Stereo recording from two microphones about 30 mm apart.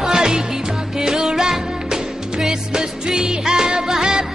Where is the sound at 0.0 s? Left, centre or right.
Right.